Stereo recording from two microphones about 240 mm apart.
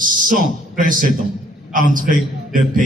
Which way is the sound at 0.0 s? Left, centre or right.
Right.